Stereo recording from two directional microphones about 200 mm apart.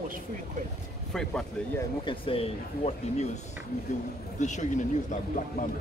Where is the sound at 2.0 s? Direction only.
25° left (ahead or behind).